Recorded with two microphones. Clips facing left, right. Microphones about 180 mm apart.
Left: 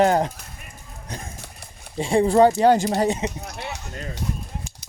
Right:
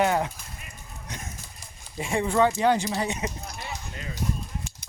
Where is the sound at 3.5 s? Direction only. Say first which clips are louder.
Left 4 dB; 70° left (ahead or behind).